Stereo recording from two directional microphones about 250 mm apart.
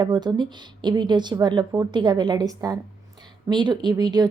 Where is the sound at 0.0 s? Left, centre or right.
Centre.